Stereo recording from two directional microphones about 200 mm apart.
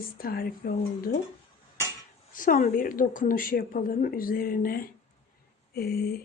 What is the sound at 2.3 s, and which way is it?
A woman's voice, 40° left (ahead or behind).